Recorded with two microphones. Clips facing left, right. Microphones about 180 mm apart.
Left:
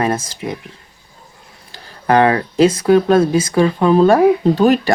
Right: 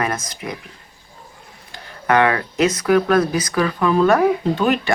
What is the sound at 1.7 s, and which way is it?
Speech, 35° left (ahead or behind).